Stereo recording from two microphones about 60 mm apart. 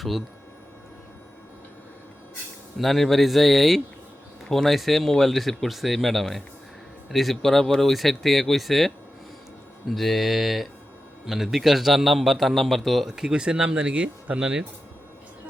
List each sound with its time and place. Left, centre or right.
2.7 s a man's voice: centre